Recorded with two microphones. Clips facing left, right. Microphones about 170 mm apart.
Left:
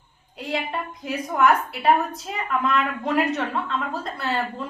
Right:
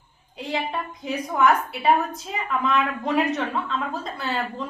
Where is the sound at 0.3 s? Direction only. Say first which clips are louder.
Even; centre (ahead or behind).